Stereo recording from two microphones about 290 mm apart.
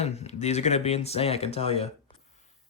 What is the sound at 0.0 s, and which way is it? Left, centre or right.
Speech, left.